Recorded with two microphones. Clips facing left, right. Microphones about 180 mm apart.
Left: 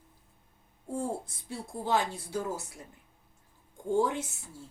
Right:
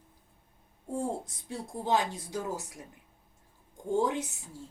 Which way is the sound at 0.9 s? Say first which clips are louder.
Right 1 dB; 20° right (ahead or behind).